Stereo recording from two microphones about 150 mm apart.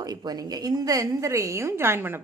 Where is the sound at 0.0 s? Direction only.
25° right (ahead or behind).